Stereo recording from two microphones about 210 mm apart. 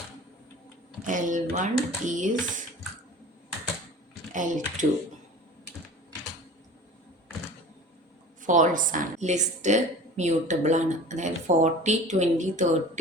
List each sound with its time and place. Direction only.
1.0 s a woman's voice: 40° right (ahead or behind)
4.4 s a woman's voice: 40° right (ahead or behind)
8.4 s a woman's voice: 35° right (ahead or behind)